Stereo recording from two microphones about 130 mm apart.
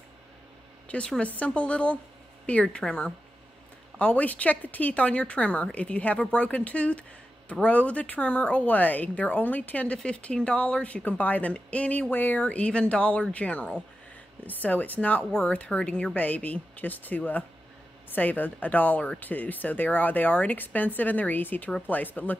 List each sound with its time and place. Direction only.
0.9 s speech: 10° left (ahead or behind)